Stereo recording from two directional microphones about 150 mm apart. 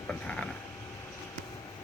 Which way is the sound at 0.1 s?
5° left (ahead or behind).